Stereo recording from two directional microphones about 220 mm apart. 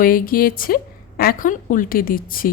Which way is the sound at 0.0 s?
40° left (ahead or behind).